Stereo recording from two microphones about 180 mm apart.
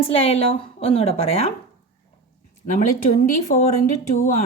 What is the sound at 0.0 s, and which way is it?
A woman's voice, 30° left (ahead or behind).